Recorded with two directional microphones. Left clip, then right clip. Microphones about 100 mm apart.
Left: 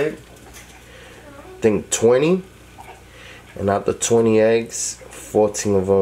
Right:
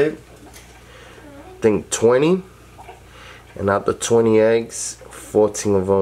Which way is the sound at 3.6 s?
Centre (ahead or behind).